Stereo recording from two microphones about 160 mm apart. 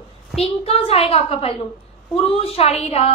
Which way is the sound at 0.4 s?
40° left (ahead or behind).